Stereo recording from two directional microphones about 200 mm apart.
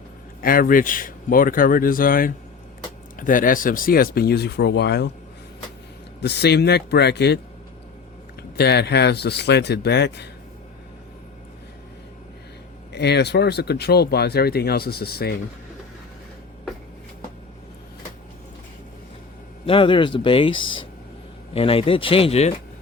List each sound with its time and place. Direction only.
0.4 s speech: 45° left (ahead or behind)
6.1 s speech: 55° left (ahead or behind)
8.4 s speech: 55° left (ahead or behind)
12.9 s speech: 55° left (ahead or behind)
19.6 s speech: 25° left (ahead or behind)